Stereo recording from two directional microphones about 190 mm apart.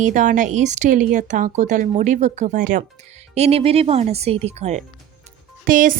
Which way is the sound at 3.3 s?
35° right (ahead or behind).